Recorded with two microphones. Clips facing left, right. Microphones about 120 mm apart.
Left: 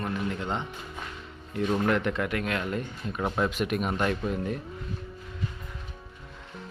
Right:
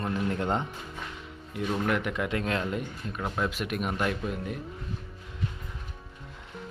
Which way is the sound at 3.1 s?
5° left (ahead or behind).